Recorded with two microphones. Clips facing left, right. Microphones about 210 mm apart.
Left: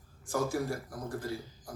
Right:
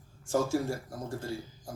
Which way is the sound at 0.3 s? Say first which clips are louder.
Right 3 dB; 25° right (ahead or behind).